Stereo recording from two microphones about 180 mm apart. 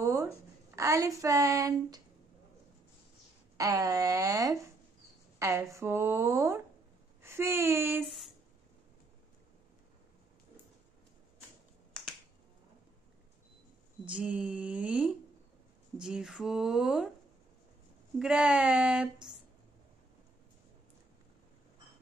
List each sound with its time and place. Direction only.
0.0 s a sound: 20° right (ahead or behind)
0.7 s a woman's voice: 20° right (ahead or behind)
3.5 s a woman's voice: 20° right (ahead or behind)
14.0 s a woman's voice: 5° right (ahead or behind)
18.2 s a woman's voice: 5° right (ahead or behind)